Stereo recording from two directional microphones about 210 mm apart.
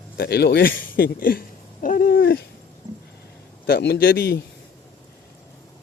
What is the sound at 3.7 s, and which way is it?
Speech, 50° left (ahead or behind).